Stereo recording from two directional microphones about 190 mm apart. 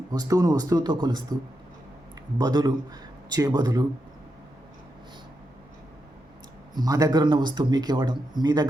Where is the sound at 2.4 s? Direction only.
20° right (ahead or behind).